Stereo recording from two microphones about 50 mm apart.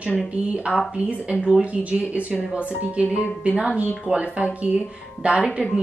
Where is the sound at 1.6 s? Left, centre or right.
Right.